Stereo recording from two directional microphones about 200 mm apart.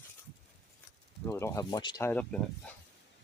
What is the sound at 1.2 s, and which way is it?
Speech, 15° left (ahead or behind).